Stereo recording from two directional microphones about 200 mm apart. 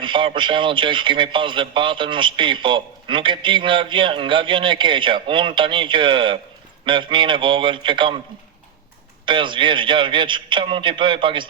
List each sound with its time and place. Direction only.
0.0 s a man's voice: 25° right (ahead or behind)
9.2 s a man's voice: 25° right (ahead or behind)